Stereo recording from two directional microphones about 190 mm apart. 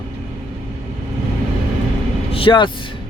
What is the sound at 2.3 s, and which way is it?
Vehicle, 25° left (ahead or behind).